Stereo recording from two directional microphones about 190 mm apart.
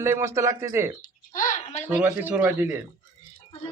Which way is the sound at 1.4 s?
45° left (ahead or behind).